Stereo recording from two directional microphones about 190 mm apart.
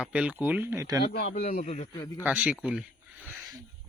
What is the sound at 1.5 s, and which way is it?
Speech, 35° left (ahead or behind).